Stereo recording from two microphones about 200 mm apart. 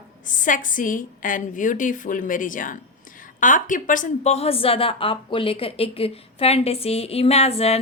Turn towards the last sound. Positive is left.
turn(degrees=30)  # may be behind; listen again after turning